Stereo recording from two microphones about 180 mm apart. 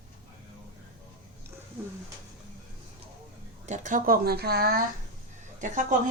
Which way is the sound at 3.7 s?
45° right (ahead or behind).